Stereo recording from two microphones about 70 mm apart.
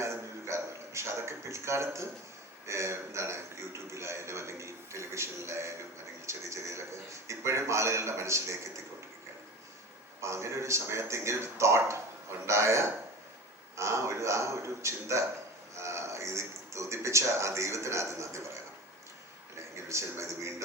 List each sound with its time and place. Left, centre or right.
0.0 s a sound: right
2.6 s a man's voice: right
10.2 s a man's voice: right
19.7 s speech: right